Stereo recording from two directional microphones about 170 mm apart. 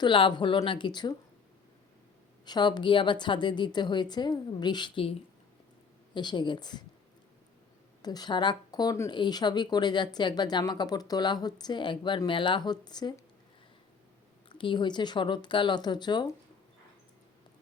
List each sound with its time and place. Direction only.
0.0 s speech: 30° left (ahead or behind)
2.4 s speech: 25° left (ahead or behind)
6.1 s speech: 25° left (ahead or behind)
8.0 s speech: 25° left (ahead or behind)
14.5 s speech: 30° left (ahead or behind)